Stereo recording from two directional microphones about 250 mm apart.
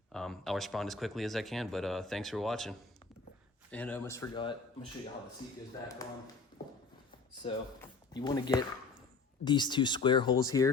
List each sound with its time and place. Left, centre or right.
0.1 s speech: centre
7.4 s speech: left